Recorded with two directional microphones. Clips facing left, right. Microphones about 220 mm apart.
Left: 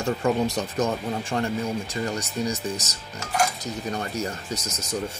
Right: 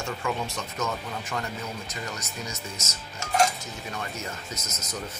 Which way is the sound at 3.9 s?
35° left (ahead or behind).